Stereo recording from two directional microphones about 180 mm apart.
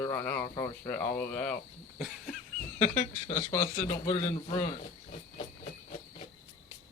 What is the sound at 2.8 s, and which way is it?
Speech, 40° left (ahead or behind).